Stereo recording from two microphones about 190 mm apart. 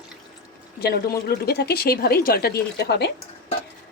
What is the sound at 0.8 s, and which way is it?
A woman's voice, 55° left (ahead or behind).